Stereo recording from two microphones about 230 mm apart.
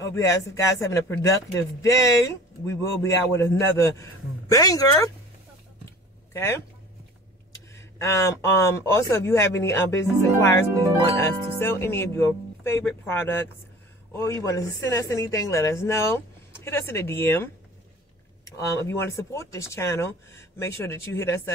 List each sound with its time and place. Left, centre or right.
0.0 s speech: centre
6.3 s speech: centre
7.7 s speech: centre
10.7 s speech: centre
11.1 s speech: centre